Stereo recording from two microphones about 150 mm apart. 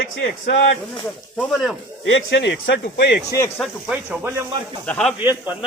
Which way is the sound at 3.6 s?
5° right (ahead or behind).